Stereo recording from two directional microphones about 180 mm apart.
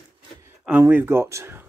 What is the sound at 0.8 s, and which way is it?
Speech, 10° right (ahead or behind).